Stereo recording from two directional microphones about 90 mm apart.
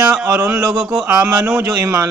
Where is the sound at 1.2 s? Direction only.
15° right (ahead or behind).